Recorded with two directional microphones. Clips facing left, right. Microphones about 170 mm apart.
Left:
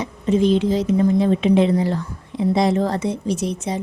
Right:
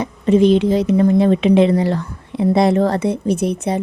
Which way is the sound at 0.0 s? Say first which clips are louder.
Right 5 dB; 65° right (ahead or behind).